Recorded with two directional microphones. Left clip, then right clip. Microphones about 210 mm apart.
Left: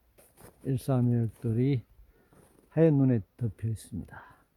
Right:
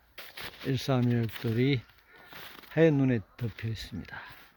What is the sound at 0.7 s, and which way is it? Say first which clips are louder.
Speech: right 1 dB; 15° left (ahead or behind).